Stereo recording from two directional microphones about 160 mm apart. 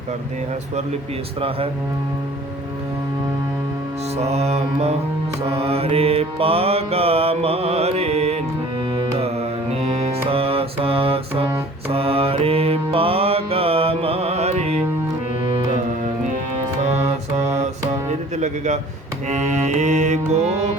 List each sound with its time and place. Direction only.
1.4 s mantra: 35° right (ahead or behind)
4.2 s mantra: 40° right (ahead or behind)
8.9 s music: 35° right (ahead or behind)
11.9 s mantra: 35° right (ahead or behind)
16.8 s mantra: 45° right (ahead or behind)
18.3 s a man's voice: 45° right (ahead or behind)
19.3 s music: 45° right (ahead or behind)